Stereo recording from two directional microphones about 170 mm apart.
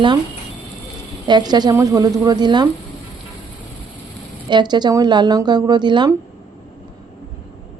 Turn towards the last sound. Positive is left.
turn(degrees=-25)  # may be behind; listen again after turning